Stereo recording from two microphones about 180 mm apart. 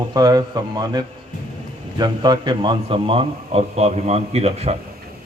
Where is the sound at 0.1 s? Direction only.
20° right (ahead or behind).